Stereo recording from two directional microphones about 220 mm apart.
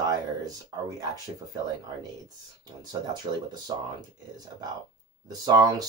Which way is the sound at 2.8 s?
20° right (ahead or behind).